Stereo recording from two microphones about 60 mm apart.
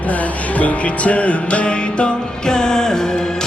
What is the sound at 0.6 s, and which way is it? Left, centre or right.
Music, left.